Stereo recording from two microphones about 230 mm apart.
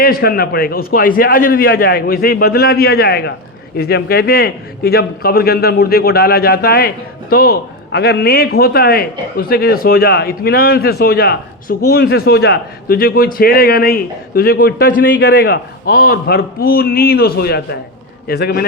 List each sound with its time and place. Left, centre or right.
0.0 s a man's voice: left